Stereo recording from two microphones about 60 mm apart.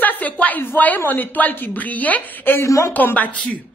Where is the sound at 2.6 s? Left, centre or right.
Left.